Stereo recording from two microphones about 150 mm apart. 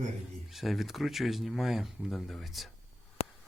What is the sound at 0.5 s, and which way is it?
Speech, centre (ahead or behind).